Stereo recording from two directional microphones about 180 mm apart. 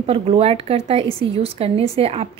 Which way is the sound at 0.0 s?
35° right (ahead or behind).